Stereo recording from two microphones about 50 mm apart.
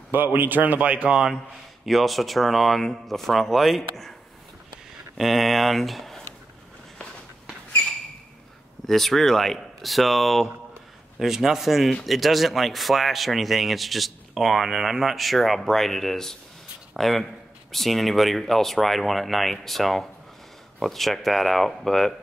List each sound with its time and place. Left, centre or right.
0.1 s speech: right
1.9 s speech: centre
5.1 s speech: centre
8.8 s speech: centre